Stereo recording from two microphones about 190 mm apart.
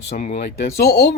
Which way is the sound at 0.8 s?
60° left (ahead or behind).